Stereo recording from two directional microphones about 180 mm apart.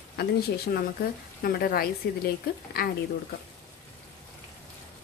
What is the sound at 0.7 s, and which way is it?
Speech, 55° left (ahead or behind).